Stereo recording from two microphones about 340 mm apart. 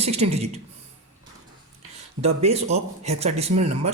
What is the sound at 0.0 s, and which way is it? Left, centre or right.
Speech, centre.